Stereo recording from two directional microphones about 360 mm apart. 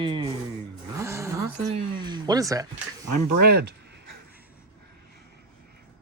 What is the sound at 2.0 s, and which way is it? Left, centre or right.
Speech, centre.